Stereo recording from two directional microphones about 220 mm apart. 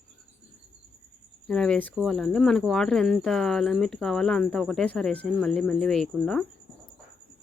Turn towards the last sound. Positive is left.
turn(degrees=5)  # may be behind; listen again after turning